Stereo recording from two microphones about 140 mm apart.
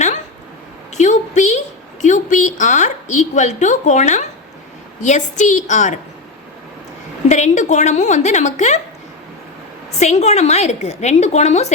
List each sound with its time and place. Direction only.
0.9 s a woman's voice: 55° left (ahead or behind)
7.3 s speech: 55° left (ahead or behind)
10.0 s a woman's voice: 55° left (ahead or behind)